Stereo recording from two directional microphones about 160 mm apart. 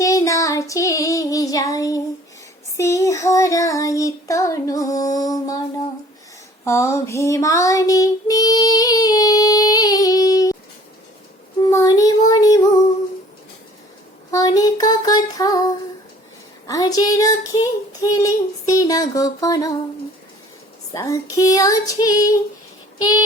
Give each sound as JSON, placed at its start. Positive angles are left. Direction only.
{"t": 0.0, "sound": "child singing", "side_deg": 20}
{"t": 6.7, "sound": "child singing", "side_deg": 15}
{"t": 11.6, "sound": "child singing", "side_deg": 20}
{"t": 14.3, "sound": "female singing", "side_deg": 20}
{"t": 16.6, "sound": "child singing", "side_deg": 25}
{"t": 20.9, "sound": "child singing", "side_deg": 20}
{"t": 23.0, "sound": "a sound", "side_deg": 25}